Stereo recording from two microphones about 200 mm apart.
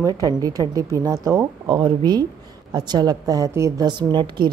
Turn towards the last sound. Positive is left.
turn(degrees=-25)  # may be behind; listen again after turning